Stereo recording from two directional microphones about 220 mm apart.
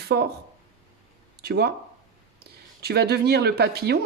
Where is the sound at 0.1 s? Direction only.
50° right (ahead or behind).